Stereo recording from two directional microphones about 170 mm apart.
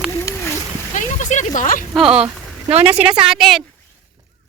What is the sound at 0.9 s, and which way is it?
Speech, 45° left (ahead or behind).